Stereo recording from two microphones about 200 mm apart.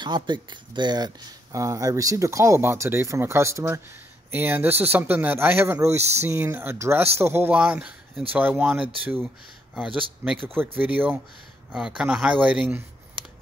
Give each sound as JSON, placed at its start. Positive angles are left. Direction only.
{"t": 0.0, "sound": "speech", "side_deg": -20}
{"t": 10.2, "sound": "speech", "side_deg": -10}